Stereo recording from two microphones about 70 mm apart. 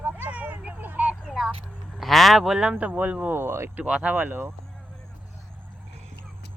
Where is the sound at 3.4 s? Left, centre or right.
Right.